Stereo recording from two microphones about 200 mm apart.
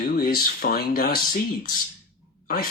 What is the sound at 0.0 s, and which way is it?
Speech, 45° left (ahead or behind).